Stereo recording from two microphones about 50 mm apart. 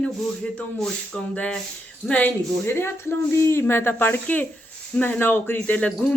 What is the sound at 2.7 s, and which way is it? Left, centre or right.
Speech, left.